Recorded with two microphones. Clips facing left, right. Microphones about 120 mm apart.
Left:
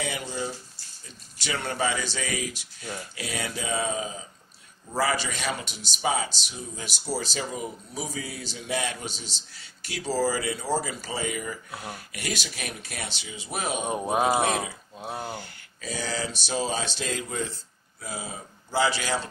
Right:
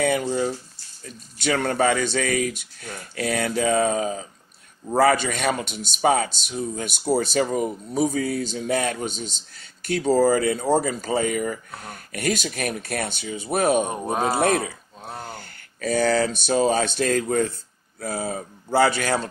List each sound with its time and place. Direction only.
0.0 s speech: 50° right (ahead or behind)
13.8 s speech: 5° left (ahead or behind)
15.3 s speech: 55° right (ahead or behind)